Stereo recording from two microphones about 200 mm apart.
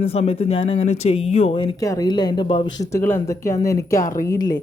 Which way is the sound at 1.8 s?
15° left (ahead or behind).